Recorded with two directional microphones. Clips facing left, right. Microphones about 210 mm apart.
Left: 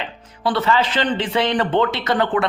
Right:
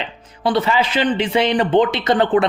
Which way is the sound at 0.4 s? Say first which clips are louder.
Right 1 dB; 15° right (ahead or behind).